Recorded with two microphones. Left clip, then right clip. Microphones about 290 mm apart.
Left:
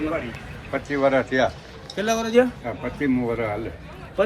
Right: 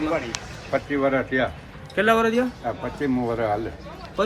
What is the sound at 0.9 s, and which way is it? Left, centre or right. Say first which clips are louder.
Speech: left 4 dB; left.